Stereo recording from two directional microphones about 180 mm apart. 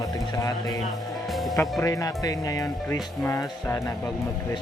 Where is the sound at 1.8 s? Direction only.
20° left (ahead or behind).